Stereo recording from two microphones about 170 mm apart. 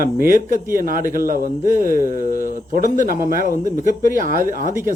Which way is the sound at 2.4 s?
55° right (ahead or behind).